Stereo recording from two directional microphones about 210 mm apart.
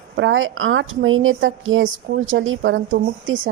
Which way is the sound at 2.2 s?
70° right (ahead or behind).